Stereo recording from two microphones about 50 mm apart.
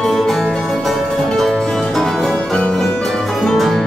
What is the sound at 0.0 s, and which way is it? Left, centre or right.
Music, centre.